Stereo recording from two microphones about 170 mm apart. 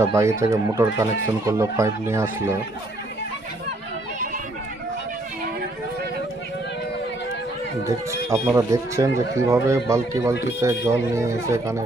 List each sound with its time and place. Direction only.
0.0 s speech: 15° right (ahead or behind)
7.9 s speech: 15° right (ahead or behind)